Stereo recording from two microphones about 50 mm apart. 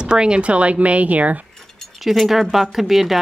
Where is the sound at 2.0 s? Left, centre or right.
Centre.